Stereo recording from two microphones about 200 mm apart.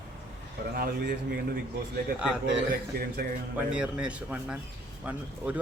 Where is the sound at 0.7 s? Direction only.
50° right (ahead or behind).